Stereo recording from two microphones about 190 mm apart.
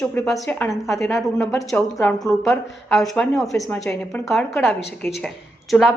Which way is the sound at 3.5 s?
15° left (ahead or behind).